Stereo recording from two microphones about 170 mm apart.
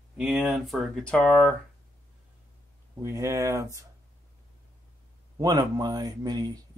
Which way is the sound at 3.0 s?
15° right (ahead or behind).